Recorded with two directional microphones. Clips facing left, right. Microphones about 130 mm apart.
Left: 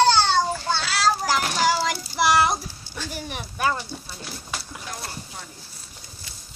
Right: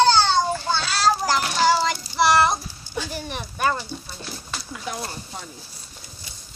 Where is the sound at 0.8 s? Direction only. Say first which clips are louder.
Right 2 dB; 5° left (ahead or behind).